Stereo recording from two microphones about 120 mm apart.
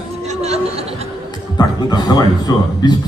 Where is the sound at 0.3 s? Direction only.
65° right (ahead or behind).